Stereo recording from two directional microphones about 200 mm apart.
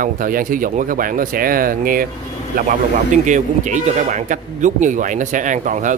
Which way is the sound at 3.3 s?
40° right (ahead or behind).